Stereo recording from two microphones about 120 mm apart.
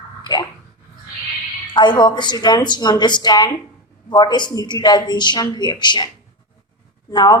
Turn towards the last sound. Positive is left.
turn(degrees=35)  # may be behind; listen again after turning